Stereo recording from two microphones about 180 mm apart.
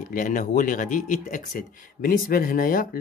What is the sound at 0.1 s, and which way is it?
Speech, 45° left (ahead or behind).